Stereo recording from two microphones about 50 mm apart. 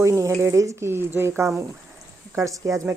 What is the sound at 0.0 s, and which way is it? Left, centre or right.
Speech, right.